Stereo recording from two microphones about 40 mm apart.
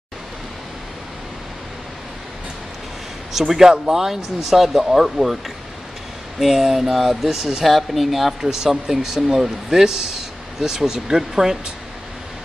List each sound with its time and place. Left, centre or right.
3.3 s speech: centre
6.4 s speech: centre
8.4 s speech: centre